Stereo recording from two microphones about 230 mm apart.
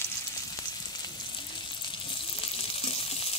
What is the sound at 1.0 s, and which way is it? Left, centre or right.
Frying, left.